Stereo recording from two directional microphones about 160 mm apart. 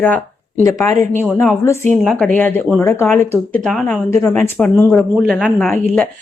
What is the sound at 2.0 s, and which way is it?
Speech, 5° left (ahead or behind).